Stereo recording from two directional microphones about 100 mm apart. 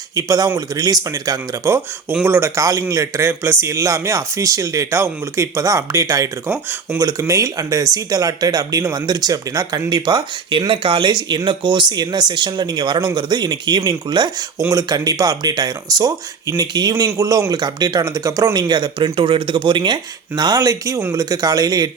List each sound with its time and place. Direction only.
0.1 s speech: 35° right (ahead or behind)
10.7 s speech: 55° right (ahead or behind); by 17.4 s 35° right (ahead or behind)
17.5 s speech: 45° right (ahead or behind)